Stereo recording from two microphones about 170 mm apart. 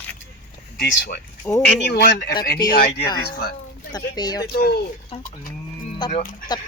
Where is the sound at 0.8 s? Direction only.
90° left.